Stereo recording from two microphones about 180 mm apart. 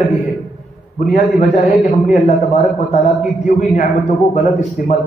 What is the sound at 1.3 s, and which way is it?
Speech, 45° left (ahead or behind).